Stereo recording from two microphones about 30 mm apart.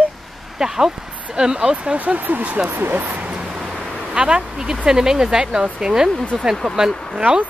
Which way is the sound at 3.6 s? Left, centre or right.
Centre.